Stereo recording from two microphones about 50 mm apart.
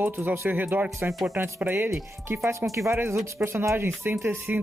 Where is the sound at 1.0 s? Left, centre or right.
Right.